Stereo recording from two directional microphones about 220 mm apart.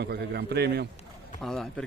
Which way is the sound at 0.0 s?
50° right (ahead or behind).